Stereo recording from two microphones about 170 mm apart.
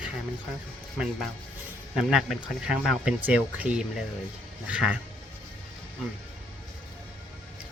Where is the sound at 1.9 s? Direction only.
Centre (ahead or behind).